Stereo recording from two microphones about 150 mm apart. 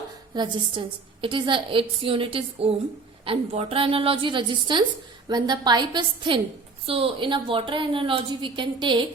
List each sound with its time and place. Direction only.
0.3 s a woman's voice: 30° right (ahead or behind)